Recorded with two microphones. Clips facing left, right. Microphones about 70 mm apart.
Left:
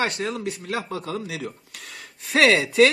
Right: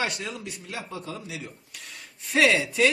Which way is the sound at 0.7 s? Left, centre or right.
Left.